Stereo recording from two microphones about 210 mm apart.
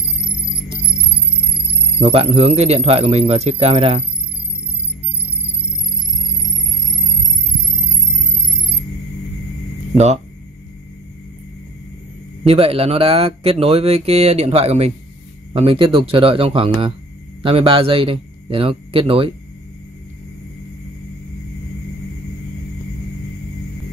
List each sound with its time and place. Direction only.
2.0 s speech: 25° right (ahead or behind)
9.9 s speech: 30° right (ahead or behind)
12.4 s speech: 30° right (ahead or behind)